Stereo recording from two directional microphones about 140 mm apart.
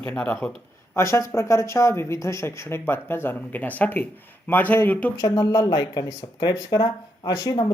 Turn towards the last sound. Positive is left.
turn(degrees=25)  # may be behind; listen again after turning